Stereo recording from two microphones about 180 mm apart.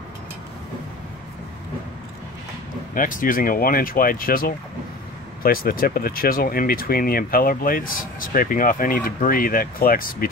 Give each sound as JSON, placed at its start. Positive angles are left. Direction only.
{"t": 2.9, "sound": "speech", "side_deg": 50}